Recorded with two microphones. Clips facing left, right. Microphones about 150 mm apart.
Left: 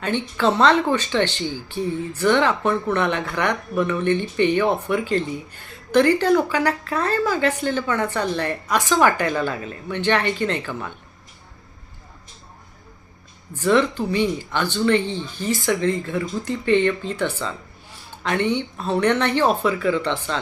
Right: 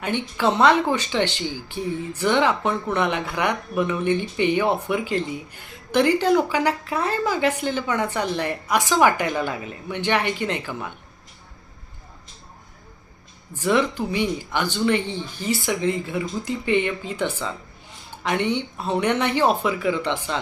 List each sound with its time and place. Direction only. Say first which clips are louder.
0.0 s speech: left 2 dB; 10° right (ahead or behind)
13.6 s speech: left 2 dB; 10° right (ahead or behind)